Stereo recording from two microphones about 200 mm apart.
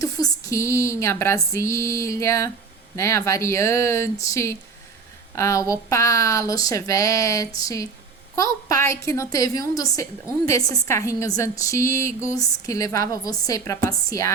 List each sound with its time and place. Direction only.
0.0 s a woman's voice: 15° left (ahead or behind)